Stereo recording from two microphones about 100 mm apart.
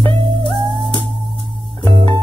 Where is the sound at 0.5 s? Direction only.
55° right (ahead or behind).